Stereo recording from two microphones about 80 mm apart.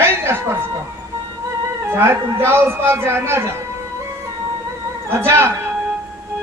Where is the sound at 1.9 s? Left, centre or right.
Right.